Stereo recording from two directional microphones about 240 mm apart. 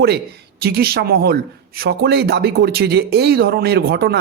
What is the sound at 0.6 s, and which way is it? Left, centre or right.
A man's voice, right.